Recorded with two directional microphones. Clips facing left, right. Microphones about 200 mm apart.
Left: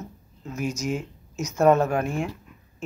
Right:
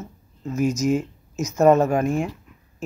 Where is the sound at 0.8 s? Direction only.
45° right (ahead or behind).